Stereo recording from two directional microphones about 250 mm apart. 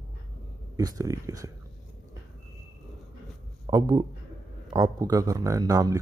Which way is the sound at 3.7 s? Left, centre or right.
Centre.